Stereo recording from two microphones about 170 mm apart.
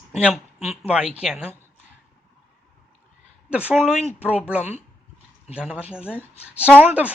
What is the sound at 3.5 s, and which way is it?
A woman's voice, 10° right (ahead or behind).